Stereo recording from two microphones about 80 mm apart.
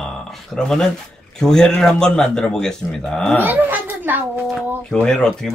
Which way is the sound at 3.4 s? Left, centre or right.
Right.